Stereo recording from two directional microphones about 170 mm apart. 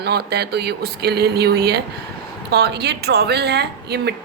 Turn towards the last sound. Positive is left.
turn(degrees=-75)  # may be behind; listen again after turning